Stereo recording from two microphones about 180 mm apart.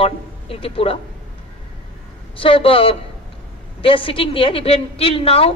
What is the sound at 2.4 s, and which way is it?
A woman's voice, 30° left (ahead or behind).